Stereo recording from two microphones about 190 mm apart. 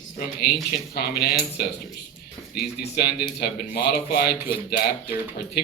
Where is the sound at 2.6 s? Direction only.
55° left (ahead or behind).